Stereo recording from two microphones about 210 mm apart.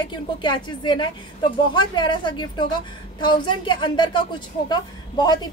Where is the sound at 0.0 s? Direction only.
20° left (ahead or behind).